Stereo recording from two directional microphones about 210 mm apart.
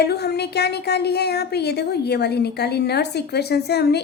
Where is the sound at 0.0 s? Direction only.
50° left (ahead or behind).